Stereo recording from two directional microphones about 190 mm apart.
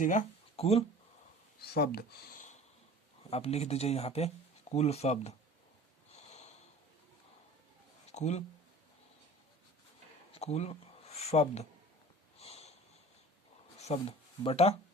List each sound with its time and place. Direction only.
0.0 s speech: 40° left (ahead or behind)
1.6 s speech: 55° left (ahead or behind)
3.2 s speech: 35° left (ahead or behind)
6.2 s snort: 35° left (ahead or behind)
8.1 s speech: 35° left (ahead or behind)
10.3 s a sound: 35° left (ahead or behind)
12.4 s snort: 35° left (ahead or behind)
13.8 s speech: 30° left (ahead or behind)